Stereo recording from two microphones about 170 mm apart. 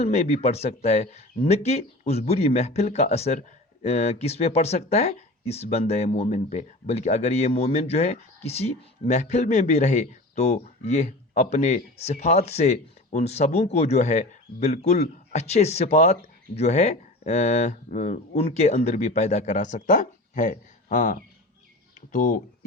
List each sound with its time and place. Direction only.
0.0 s speech: 40° left (ahead or behind)